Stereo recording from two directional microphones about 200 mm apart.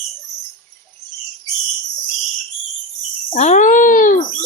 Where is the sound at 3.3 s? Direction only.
35° left (ahead or behind).